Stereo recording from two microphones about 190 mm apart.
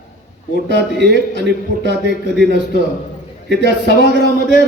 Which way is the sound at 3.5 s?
60° right (ahead or behind).